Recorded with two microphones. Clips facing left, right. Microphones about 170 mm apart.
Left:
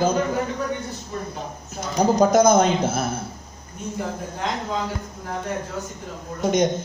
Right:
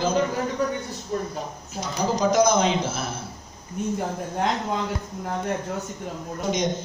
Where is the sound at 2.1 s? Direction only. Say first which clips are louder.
Left 4 dB; 50° left (ahead or behind).